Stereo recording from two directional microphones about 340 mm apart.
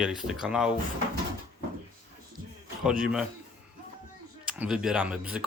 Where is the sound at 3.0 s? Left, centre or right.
Centre.